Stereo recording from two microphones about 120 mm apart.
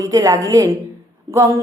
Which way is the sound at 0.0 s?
30° right (ahead or behind).